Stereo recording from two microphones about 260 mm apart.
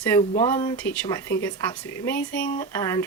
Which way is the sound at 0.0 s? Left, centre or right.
Centre.